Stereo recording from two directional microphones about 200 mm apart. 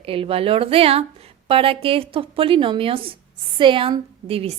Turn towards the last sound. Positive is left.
turn(degrees=-30)  # may be behind; listen again after turning